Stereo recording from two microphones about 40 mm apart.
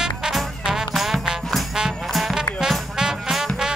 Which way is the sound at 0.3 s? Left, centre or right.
Centre.